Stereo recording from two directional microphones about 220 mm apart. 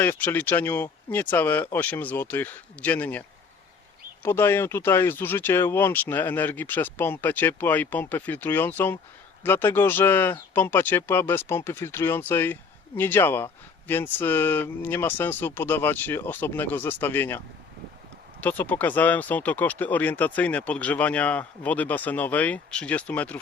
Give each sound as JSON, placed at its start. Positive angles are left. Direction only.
{"t": 0.0, "sound": "speech", "side_deg": 10}